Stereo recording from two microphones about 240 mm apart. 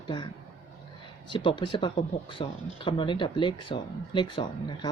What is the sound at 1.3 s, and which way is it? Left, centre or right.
Speech, centre.